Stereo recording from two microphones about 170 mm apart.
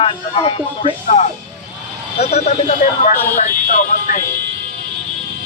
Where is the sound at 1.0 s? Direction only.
45° left (ahead or behind).